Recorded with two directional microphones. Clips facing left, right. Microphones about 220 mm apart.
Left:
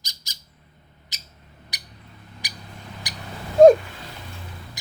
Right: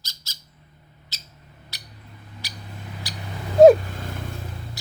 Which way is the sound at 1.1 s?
15° left (ahead or behind).